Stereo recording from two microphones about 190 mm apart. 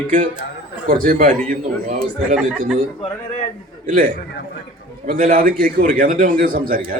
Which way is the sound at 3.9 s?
45° right (ahead or behind).